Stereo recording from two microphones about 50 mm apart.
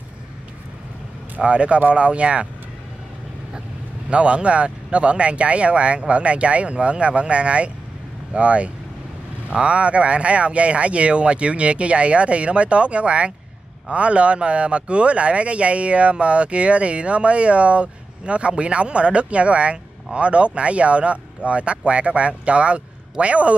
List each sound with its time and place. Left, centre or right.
1.4 s speech: right
4.1 s speech: right